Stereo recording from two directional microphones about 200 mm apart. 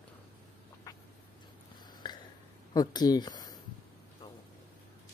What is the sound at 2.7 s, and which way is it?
Speech, 20° left (ahead or behind).